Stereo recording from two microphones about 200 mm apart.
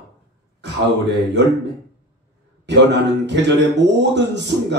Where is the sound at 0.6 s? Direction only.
60° right (ahead or behind).